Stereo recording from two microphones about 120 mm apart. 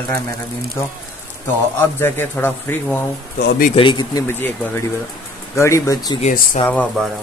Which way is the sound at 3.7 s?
40° left (ahead or behind).